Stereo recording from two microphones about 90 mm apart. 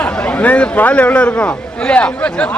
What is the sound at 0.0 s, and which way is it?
A man's voice, 15° left (ahead or behind).